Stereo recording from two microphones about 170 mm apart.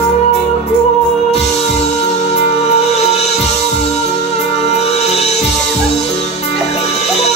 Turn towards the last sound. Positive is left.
turn(degrees=40)  # may be behind; listen again after turning